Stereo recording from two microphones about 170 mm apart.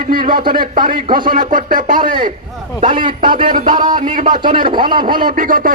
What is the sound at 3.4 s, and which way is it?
Speech, 50° right (ahead or behind).